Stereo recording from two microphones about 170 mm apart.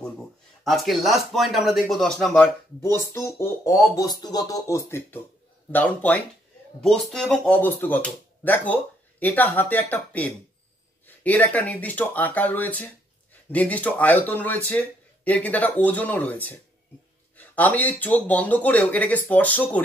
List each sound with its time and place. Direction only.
0.7 s speech: centre (ahead or behind)
2.8 s speech: 15° left (ahead or behind)